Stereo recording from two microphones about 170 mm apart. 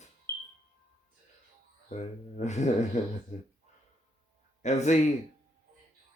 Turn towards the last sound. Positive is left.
turn(degrees=45)  # may be behind; listen again after turning